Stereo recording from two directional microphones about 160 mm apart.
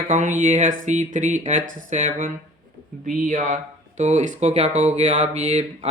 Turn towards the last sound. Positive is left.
turn(degrees=-45)  # may be behind; listen again after turning